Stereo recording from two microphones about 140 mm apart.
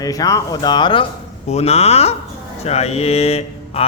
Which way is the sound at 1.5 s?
50° left (ahead or behind).